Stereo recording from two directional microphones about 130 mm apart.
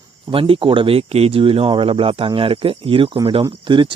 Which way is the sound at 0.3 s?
45° right (ahead or behind).